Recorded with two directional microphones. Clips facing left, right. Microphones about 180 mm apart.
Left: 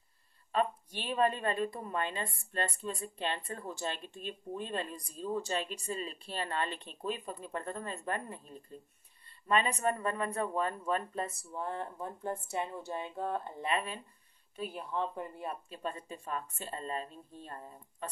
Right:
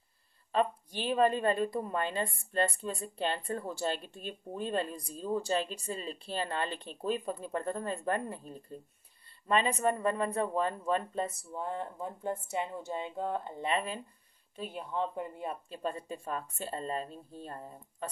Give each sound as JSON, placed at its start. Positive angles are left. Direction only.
{"t": 1.0, "sound": "speech", "side_deg": -30}
{"t": 9.5, "sound": "speech", "side_deg": -30}
{"t": 15.7, "sound": "speech", "side_deg": -35}